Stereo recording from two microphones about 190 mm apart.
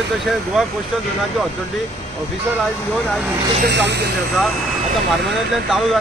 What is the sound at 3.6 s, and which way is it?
Speech, 65° right (ahead or behind).